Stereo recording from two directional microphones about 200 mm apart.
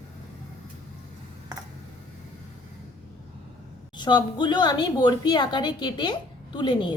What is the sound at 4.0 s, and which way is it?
A woman's voice, 20° left (ahead or behind).